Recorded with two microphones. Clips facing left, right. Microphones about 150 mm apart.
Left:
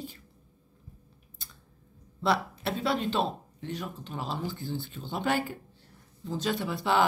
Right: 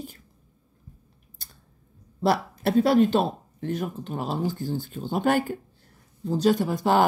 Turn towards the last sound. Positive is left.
turn(degrees=-45)  # may be behind; listen again after turning